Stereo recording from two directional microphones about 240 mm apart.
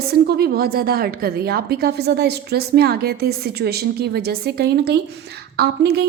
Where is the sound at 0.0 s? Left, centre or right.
Right.